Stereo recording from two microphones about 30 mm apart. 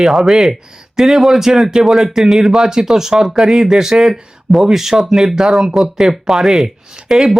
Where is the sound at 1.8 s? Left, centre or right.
Centre.